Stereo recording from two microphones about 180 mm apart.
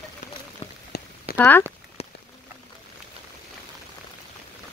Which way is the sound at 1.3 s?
10° left (ahead or behind).